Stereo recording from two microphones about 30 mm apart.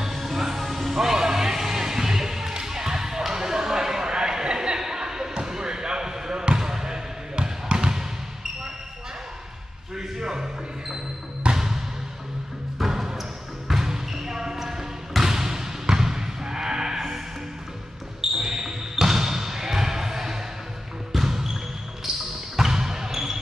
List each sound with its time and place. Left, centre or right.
0.0 s music: centre
2.5 s basketball bounce: centre
9.9 s basketball bounce: centre
18.4 s basketball bounce: centre
22.6 s basketball bounce: centre